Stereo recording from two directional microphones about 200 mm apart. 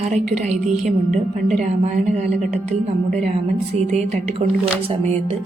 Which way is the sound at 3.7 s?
35° right (ahead or behind).